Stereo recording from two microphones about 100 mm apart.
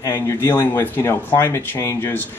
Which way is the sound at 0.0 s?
25° left (ahead or behind).